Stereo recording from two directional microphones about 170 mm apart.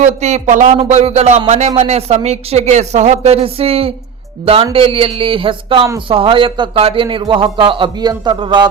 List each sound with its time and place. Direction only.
0.0 s a man's voice: 45° right (ahead or behind); by 8.6 s 25° right (ahead or behind)